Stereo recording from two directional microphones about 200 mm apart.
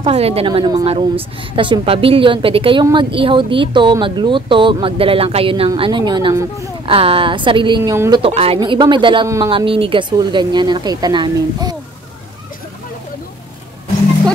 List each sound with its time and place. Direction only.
0.0 s a woman's voice: 30° right (ahead or behind)
8.2 s a woman's voice: 30° right (ahead or behind)